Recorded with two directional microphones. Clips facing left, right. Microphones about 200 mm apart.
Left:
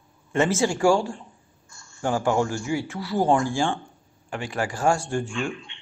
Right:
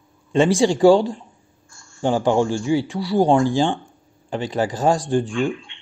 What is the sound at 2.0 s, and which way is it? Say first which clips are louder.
Speech: right 5 dB; 25° right (ahead or behind).